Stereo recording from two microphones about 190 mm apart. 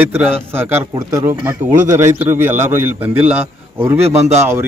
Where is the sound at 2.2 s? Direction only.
10° right (ahead or behind).